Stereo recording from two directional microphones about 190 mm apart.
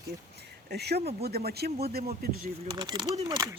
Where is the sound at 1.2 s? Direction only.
55° right (ahead or behind).